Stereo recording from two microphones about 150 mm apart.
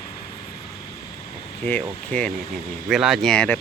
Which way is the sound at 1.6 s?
10° left (ahead or behind).